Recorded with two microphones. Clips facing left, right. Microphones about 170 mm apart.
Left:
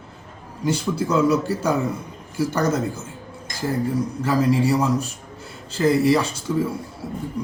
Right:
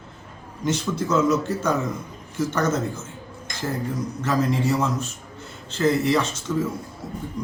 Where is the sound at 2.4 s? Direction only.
35° left (ahead or behind).